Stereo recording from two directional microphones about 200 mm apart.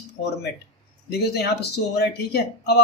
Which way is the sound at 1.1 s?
55° left (ahead or behind).